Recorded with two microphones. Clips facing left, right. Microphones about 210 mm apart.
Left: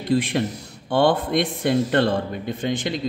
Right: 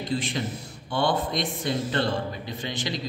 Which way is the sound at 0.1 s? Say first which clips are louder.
Left 9 dB; 60° left (ahead or behind).